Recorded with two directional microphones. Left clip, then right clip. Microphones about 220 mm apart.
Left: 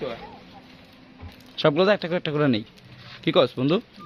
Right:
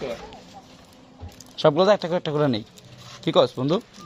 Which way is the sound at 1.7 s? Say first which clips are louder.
Right 2 dB; 25° left (ahead or behind).